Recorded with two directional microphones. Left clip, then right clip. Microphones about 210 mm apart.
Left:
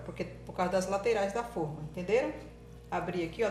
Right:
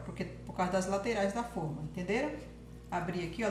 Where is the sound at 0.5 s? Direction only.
50° left (ahead or behind).